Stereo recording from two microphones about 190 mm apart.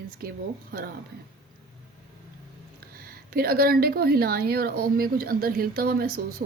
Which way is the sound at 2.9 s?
50° right (ahead or behind).